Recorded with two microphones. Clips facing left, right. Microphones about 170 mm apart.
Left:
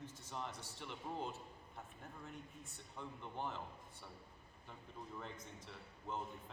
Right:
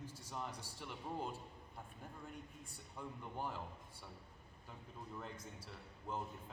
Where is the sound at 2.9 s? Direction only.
5° right (ahead or behind).